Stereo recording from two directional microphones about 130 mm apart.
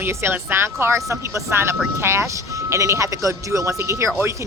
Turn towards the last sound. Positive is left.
turn(degrees=-20)  # may be behind; listen again after turning